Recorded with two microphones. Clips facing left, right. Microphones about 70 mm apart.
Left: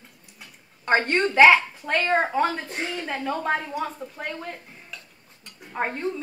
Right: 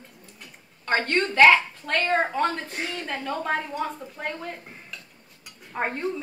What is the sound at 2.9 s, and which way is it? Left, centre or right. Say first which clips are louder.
A woman's voice: left 3 dB; centre.